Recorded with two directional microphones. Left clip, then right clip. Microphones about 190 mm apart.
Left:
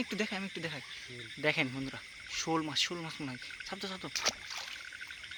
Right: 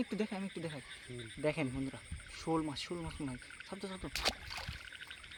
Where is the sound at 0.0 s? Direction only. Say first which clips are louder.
Left 4 dB; centre (ahead or behind).